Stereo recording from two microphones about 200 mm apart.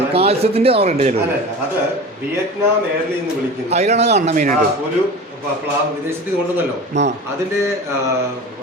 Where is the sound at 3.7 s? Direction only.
35° right (ahead or behind).